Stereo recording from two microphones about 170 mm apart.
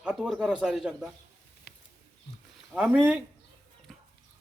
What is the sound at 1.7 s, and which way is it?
Wild animals, 70° left (ahead or behind).